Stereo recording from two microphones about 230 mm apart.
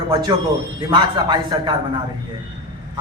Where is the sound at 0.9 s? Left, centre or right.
Centre.